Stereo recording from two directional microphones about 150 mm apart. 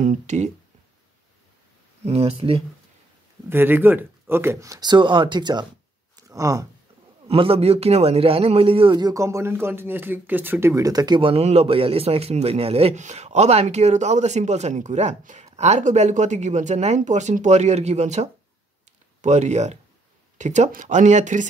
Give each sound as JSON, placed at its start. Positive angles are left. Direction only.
{"t": 0.0, "sound": "a man's voice", "side_deg": -55}
{"t": 2.0, "sound": "a man's voice", "side_deg": -45}
{"t": 3.4, "sound": "speech", "side_deg": -15}
{"t": 6.1, "sound": "a sound", "side_deg": -20}
{"t": 7.2, "sound": "a man's voice", "side_deg": -40}